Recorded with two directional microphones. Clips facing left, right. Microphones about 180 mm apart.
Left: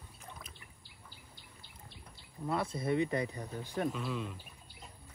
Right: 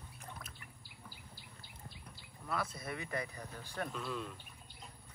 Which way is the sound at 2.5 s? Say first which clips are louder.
Left 7 dB; 25° left (ahead or behind).